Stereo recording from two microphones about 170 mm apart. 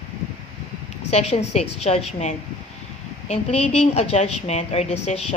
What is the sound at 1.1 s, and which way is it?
Speech, 40° left (ahead or behind).